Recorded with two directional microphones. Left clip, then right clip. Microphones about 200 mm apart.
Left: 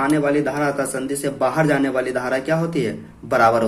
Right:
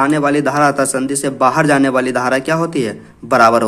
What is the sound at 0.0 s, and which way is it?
A man's voice, 40° right (ahead or behind).